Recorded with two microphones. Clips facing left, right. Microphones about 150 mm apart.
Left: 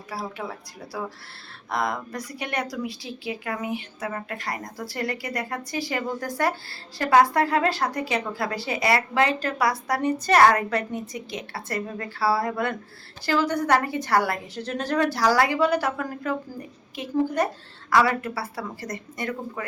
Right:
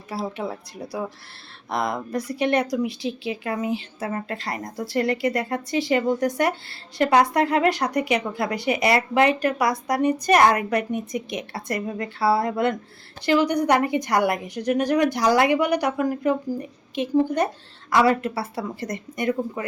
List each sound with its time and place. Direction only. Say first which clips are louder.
0.1 s a woman's voice: right 4 dB; 25° right (ahead or behind)